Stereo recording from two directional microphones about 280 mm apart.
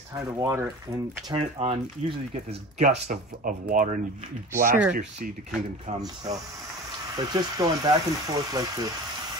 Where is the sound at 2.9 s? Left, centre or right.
Right.